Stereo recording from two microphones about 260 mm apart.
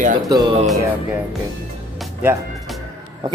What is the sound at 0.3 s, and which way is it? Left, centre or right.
Speech, centre.